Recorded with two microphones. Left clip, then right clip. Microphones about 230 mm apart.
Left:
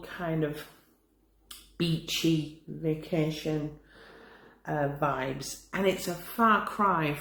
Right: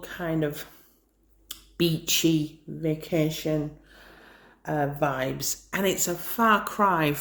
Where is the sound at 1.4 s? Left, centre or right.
Right.